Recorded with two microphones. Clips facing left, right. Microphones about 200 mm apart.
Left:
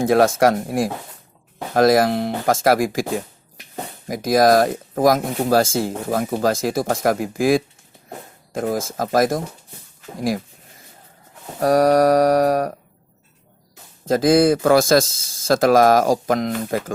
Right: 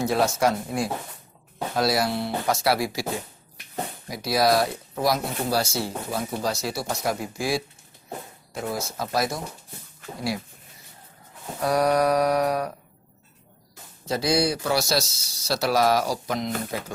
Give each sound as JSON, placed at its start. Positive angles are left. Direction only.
{"t": 0.0, "sound": "a man's voice", "side_deg": 50}
{"t": 1.7, "sound": "a man's voice", "side_deg": 50}
{"t": 4.1, "sound": "a man's voice", "side_deg": 50}
{"t": 11.6, "sound": "a man's voice", "side_deg": 45}
{"t": 14.0, "sound": "a man's voice", "side_deg": 50}